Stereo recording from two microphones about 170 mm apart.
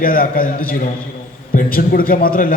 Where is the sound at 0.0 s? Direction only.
55° left (ahead or behind).